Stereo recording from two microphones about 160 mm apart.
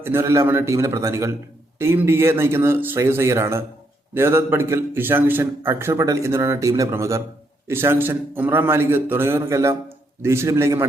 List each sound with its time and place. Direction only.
0.0 s a man's voice: 15° right (ahead or behind)